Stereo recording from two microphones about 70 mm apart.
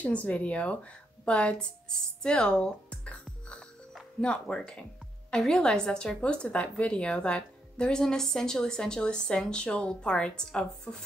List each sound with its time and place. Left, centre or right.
0.0 s a woman's voice: left